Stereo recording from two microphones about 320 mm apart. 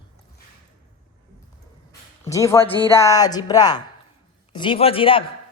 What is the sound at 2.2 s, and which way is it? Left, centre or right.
A man's voice, centre.